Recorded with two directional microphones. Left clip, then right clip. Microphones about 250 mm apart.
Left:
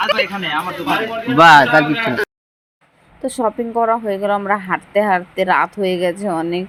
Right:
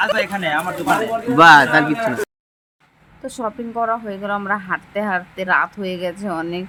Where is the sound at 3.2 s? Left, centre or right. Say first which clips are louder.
Left 7 dB; centre.